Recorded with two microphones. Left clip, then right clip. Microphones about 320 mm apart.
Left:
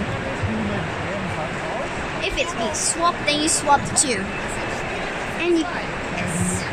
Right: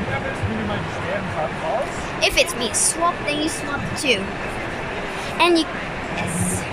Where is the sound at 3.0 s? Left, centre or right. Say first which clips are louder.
Left 2 dB; centre.